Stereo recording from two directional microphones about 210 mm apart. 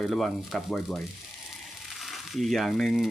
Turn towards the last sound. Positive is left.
turn(degrees=0)  # may be behind; listen again after turning